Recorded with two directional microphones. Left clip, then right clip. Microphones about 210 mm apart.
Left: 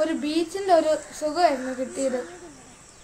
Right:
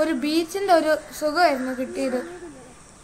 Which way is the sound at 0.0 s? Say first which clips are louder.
Right 2 dB; 15° right (ahead or behind).